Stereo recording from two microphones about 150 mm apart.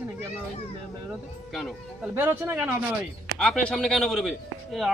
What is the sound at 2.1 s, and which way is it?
Speech, 15° right (ahead or behind).